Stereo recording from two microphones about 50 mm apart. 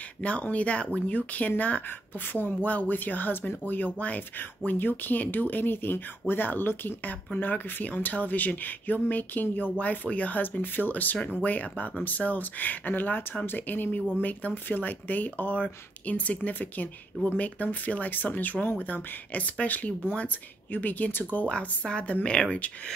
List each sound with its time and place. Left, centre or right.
0.2 s a woman's voice: left
7.3 s speech: left
10.4 s a woman's voice: left
21.5 s a woman's voice: centre